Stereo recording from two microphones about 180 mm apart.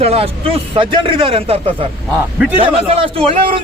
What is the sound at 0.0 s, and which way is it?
A man's voice, 35° right (ahead or behind).